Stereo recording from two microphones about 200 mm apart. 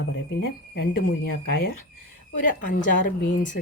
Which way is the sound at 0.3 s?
55° left (ahead or behind).